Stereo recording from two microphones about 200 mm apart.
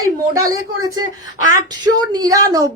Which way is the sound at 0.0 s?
15° right (ahead or behind).